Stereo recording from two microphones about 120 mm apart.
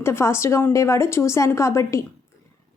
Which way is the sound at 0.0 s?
20° left (ahead or behind).